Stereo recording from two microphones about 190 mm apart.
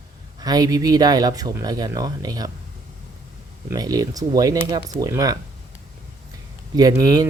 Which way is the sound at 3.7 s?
20° right (ahead or behind).